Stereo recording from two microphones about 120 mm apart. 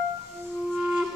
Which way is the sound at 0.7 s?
5° right (ahead or behind).